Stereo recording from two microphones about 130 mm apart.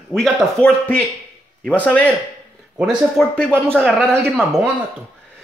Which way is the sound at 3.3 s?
10° left (ahead or behind).